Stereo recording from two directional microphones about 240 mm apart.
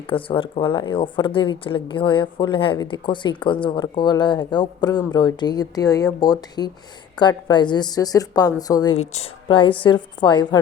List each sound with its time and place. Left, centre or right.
0.1 s a woman's voice: left